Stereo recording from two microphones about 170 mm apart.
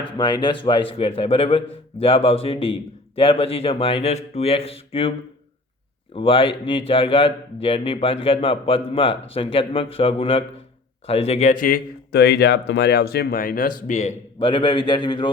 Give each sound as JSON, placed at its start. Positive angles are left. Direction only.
{"t": 0.2, "sound": "a man's voice", "side_deg": 25}
{"t": 6.1, "sound": "a man's voice", "side_deg": 30}
{"t": 14.4, "sound": "a man's voice", "side_deg": 30}